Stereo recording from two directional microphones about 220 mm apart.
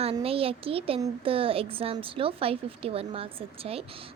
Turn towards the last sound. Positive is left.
turn(degrees=-25)  # may be behind; listen again after turning